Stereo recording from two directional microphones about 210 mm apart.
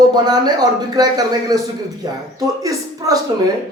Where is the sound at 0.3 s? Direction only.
20° right (ahead or behind).